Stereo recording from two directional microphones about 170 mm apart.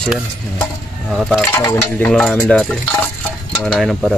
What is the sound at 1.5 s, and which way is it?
Speech, 15° left (ahead or behind).